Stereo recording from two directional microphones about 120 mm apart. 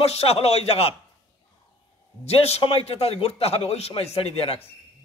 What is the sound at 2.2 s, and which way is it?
A man's voice, 55° left (ahead or behind).